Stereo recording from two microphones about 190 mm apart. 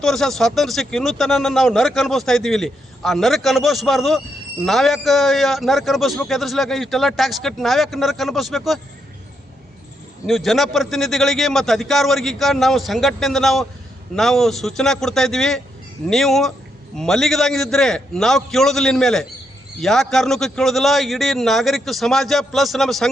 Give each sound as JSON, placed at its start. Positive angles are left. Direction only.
{"t": 0.0, "sound": "a man's voice", "side_deg": 0}
{"t": 10.2, "sound": "a man's voice", "side_deg": 0}